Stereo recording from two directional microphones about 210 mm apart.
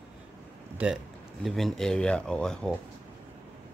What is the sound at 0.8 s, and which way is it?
Speech, 10° right (ahead or behind).